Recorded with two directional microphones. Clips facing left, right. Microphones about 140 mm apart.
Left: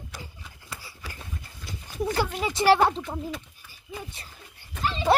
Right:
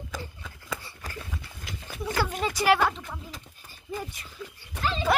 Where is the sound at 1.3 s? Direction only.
90° right.